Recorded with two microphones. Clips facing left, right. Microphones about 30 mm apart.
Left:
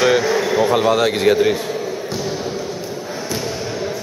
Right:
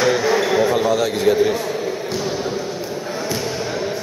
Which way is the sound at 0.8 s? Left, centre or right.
Left.